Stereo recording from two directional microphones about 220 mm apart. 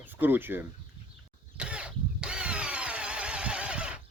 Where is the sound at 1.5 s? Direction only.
5° right (ahead or behind).